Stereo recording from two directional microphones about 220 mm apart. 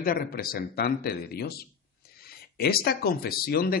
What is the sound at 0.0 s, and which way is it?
Speech, 40° left (ahead or behind).